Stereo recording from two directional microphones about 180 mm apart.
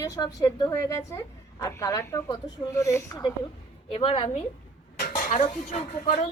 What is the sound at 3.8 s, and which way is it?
Speech, 30° left (ahead or behind).